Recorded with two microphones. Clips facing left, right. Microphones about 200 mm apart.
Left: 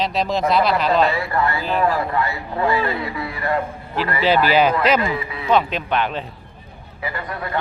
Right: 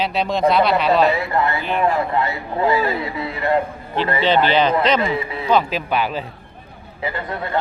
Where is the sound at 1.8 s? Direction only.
25° right (ahead or behind).